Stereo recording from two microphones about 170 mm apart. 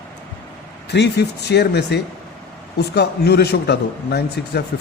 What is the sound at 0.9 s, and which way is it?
Speech, 85° left.